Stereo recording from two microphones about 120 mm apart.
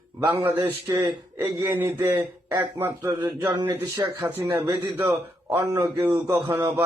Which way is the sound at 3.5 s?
35° right (ahead or behind).